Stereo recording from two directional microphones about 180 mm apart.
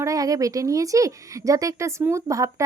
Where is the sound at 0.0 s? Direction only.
20° right (ahead or behind).